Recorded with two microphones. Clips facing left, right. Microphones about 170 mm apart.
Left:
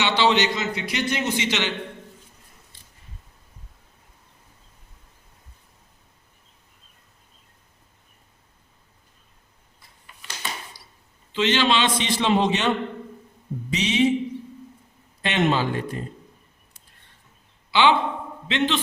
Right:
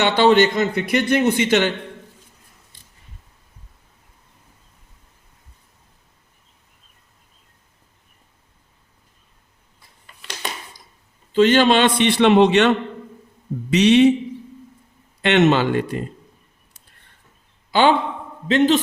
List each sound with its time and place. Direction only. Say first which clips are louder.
0.0 s a man's voice: right 6 dB; 50° right (ahead or behind)
11.3 s a man's voice: right 7 dB; 50° right (ahead or behind); by 14.1 s 70° right (ahead or behind)
15.2 s speech: right 7 dB; 70° right (ahead or behind)
17.7 s a sound: right 3 dB; 45° right (ahead or behind)
18.4 s a man's voice: right 8 dB; 40° right (ahead or behind)